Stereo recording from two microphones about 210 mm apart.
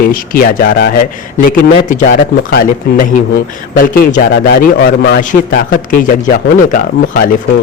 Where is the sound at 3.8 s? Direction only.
45° left (ahead or behind).